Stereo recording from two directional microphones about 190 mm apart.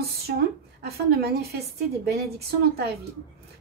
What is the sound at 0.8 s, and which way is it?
A woman's voice, 55° right (ahead or behind).